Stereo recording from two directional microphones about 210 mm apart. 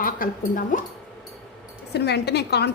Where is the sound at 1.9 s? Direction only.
50° left (ahead or behind).